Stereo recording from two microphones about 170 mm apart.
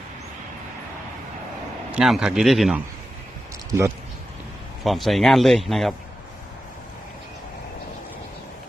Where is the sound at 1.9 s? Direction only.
5° right (ahead or behind).